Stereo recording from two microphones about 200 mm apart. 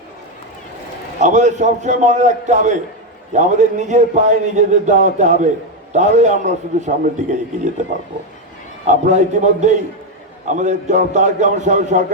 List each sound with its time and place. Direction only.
1.2 s a man's voice: 35° right (ahead or behind)
7.9 s a man's voice: 35° right (ahead or behind)